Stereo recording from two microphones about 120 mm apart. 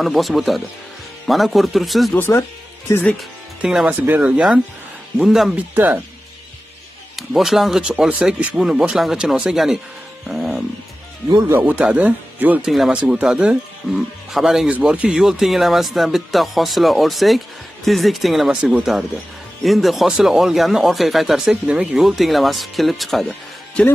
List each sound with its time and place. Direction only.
0.0 s speech: centre (ahead or behind)
2.1 s speech: 20° left (ahead or behind)
3.2 s speech: 5° right (ahead or behind)
7.2 s speech: centre (ahead or behind)
11.4 s speech: 15° right (ahead or behind); by 23.8 s centre (ahead or behind)